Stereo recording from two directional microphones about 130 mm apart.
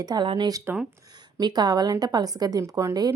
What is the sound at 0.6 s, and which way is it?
Speech, 10° right (ahead or behind).